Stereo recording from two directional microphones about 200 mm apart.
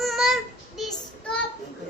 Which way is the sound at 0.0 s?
Centre (ahead or behind).